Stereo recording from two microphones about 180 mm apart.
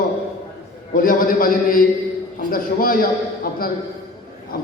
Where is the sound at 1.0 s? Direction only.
50° left (ahead or behind).